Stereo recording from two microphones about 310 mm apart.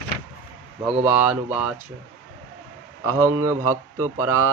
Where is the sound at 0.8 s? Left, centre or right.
Centre.